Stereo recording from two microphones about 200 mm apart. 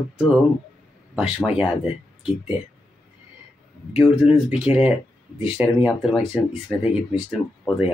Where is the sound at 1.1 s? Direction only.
Centre (ahead or behind).